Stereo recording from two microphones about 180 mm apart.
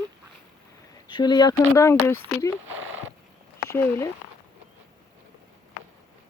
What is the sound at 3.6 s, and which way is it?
Speech, 10° left (ahead or behind).